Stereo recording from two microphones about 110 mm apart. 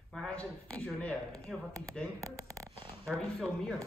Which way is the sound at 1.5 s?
Centre (ahead or behind).